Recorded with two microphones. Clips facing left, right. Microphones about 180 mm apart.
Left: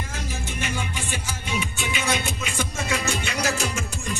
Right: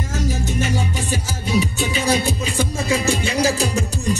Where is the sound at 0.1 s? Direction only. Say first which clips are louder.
Right 10 dB; 40° right (ahead or behind).